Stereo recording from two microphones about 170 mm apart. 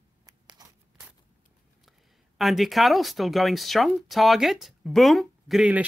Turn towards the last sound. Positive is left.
turn(degrees=-5)  # may be behind; listen again after turning